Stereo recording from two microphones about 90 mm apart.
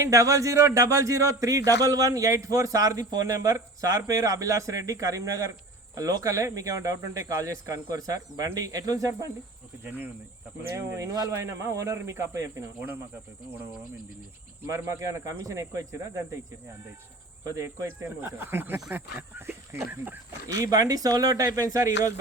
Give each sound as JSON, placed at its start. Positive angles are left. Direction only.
{"t": 0.0, "sound": "speech", "side_deg": -35}
{"t": 10.6, "sound": "speech", "side_deg": -35}
{"t": 14.7, "sound": "speech", "side_deg": -35}
{"t": 18.0, "sound": "speech", "side_deg": -25}
{"t": 20.6, "sound": "speech", "side_deg": -40}